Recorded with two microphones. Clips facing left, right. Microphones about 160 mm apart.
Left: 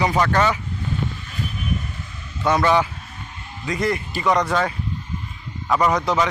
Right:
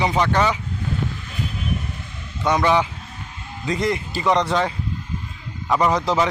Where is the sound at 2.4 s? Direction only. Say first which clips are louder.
Even; 15° right (ahead or behind).